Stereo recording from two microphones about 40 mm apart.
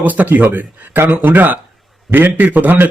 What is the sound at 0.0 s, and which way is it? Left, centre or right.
A man's voice, right.